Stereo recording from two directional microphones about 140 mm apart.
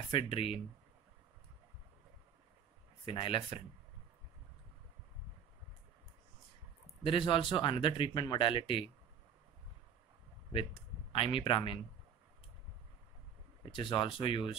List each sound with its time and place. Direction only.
0.1 s speech: 40° left (ahead or behind)
3.1 s speech: 35° left (ahead or behind)
7.1 s speech: 35° left (ahead or behind)
10.5 s speech: 40° left (ahead or behind)
13.7 s speech: 35° left (ahead or behind)